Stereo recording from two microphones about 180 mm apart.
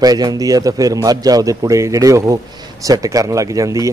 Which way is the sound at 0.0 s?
20° right (ahead or behind).